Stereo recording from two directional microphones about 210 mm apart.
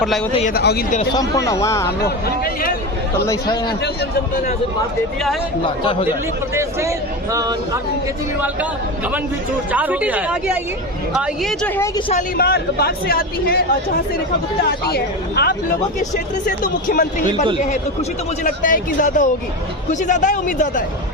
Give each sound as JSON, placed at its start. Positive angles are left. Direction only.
{"t": 0.5, "sound": "a man's voice", "side_deg": 50}
{"t": 1.1, "sound": "speech", "side_deg": 15}
{"t": 2.0, "sound": "a man's voice", "side_deg": 45}
{"t": 3.2, "sound": "speech", "side_deg": 20}
{"t": 5.6, "sound": "speech", "side_deg": 25}
{"t": 6.5, "sound": "a man's voice", "side_deg": -15}
{"t": 9.7, "sound": "a man's voice", "side_deg": -5}
{"t": 11.8, "sound": "speech", "side_deg": 20}
{"t": 12.4, "sound": "a man's voice", "side_deg": 50}
{"t": 14.6, "sound": "a man's voice", "side_deg": 50}
{"t": 16.9, "sound": "a man's voice", "side_deg": 40}
{"t": 18.4, "sound": "a man's voice", "side_deg": 40}